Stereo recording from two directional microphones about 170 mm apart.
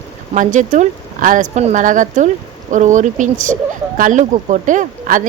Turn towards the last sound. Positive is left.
turn(degrees=-50)  # may be behind; listen again after turning